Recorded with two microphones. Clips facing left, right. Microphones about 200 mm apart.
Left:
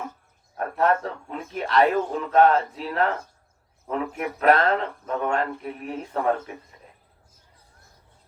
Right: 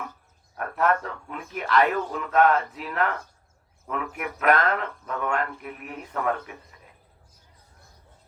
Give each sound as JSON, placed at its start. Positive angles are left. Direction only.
{"t": 0.5, "sound": "speech", "side_deg": 30}